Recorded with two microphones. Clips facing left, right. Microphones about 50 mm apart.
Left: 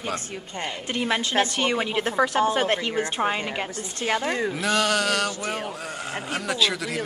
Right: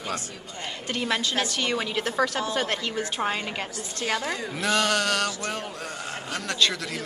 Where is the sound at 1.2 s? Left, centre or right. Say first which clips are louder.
Left 4 dB; left.